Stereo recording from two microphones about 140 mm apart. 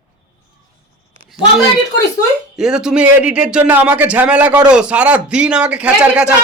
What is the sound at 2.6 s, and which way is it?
A man's voice, 5° right (ahead or behind).